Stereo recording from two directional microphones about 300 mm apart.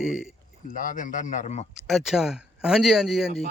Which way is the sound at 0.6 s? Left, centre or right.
Left.